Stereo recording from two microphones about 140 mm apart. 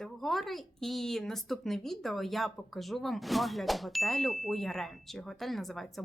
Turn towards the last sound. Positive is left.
turn(degrees=0)  # may be behind; listen again after turning